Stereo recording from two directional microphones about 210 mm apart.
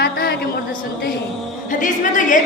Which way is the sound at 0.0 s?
50° left (ahead or behind).